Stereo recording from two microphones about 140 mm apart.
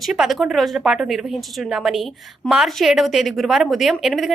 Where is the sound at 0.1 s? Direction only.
Centre (ahead or behind).